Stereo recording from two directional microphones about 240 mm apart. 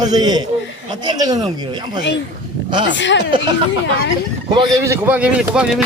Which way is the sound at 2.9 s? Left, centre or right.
Left.